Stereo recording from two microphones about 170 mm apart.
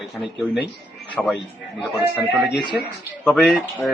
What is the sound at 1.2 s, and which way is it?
Speech, 5° left (ahead or behind).